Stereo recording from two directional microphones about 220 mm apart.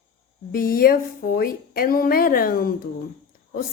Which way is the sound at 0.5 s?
40° left (ahead or behind).